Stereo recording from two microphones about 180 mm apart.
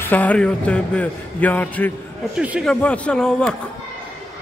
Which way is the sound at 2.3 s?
5° right (ahead or behind).